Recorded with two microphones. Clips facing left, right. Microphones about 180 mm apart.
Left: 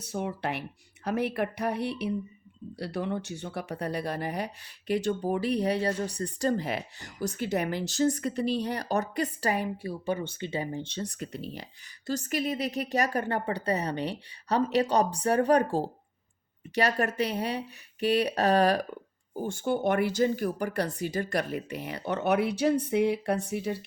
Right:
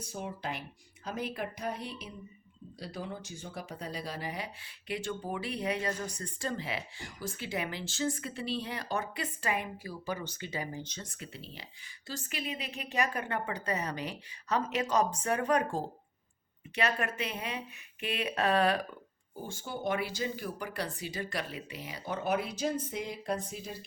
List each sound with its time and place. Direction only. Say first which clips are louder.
0.0 s speech: left 7 dB; 70° left (ahead or behind); by 18.9 s 40° left (ahead or behind)
19.3 s speech: left 11 dB; 60° left (ahead or behind)